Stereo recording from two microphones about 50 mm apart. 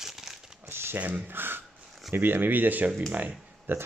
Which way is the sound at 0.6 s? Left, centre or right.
Right.